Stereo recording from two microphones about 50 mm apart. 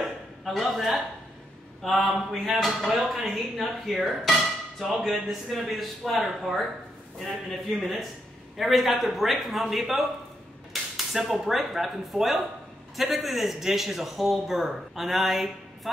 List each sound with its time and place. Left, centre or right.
0.0 s a sound: centre
1.8 s a man's voice: centre
8.5 s a man's voice: centre